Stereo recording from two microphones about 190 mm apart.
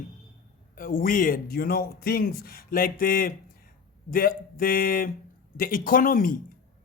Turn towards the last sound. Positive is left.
turn(degrees=45)  # may be behind; listen again after turning